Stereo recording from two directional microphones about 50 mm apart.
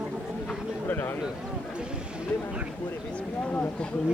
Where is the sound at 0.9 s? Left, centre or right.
Left.